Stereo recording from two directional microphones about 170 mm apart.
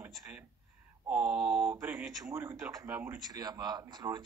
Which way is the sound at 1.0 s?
5° right (ahead or behind).